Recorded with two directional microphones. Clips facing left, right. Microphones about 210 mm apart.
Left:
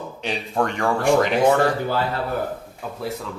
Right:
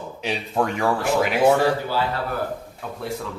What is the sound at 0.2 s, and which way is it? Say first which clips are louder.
Speech: even; 5° right (ahead or behind).